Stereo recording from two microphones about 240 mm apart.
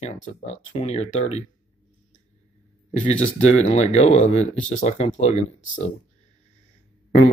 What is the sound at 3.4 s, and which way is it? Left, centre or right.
Speech, left.